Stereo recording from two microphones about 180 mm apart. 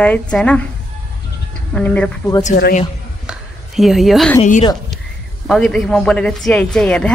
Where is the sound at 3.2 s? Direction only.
Centre (ahead or behind).